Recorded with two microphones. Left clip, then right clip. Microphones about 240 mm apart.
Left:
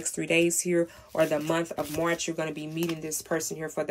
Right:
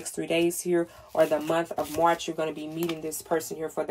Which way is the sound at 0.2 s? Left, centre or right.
Left.